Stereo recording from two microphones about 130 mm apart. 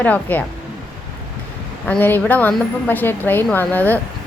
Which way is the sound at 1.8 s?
15° left (ahead or behind).